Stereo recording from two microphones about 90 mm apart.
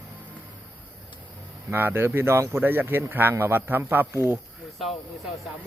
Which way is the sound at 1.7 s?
25° right (ahead or behind).